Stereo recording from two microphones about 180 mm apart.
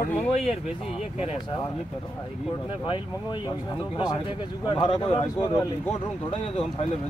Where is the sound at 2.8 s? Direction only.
25° left (ahead or behind).